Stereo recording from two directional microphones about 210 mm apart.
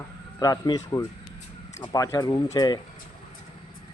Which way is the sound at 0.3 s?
15° left (ahead or behind).